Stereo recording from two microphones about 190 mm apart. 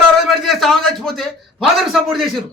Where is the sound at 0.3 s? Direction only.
Centre (ahead or behind).